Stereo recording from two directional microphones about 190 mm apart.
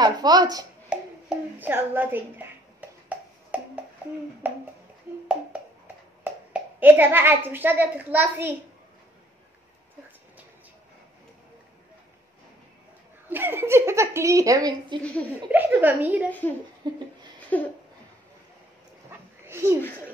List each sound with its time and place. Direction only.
0.0 s speech: 20° right (ahead or behind)
0.9 s music: 5° right (ahead or behind)
1.6 s a woman's voice: 10° right (ahead or behind)
3.1 s a sound: 5° right (ahead or behind)
4.4 s a woman's voice: 10° right (ahead or behind)
5.1 s a sound: 10° right (ahead or behind)
6.2 s speech: 10° right (ahead or behind)
13.3 s a woman's voice: 10° right (ahead or behind)
15.5 s a woman's voice: 10° right (ahead or behind)
16.3 s a woman's voice: 10° left (ahead or behind)
16.8 s speech: 25° right (ahead or behind)
17.5 s a woman's voice: 10° left (ahead or behind)
19.0 s a sound: 15° right (ahead or behind)